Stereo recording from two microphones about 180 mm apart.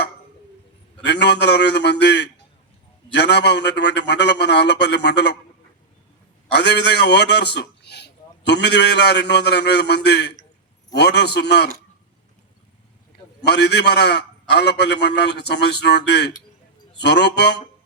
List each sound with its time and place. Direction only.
1.0 s a man's voice: 70° left (ahead or behind)
6.5 s a man's voice: 70° left (ahead or behind)
13.5 s a man's voice: 65° left (ahead or behind)